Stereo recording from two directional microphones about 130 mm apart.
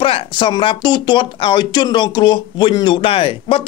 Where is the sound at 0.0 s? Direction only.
40° left (ahead or behind).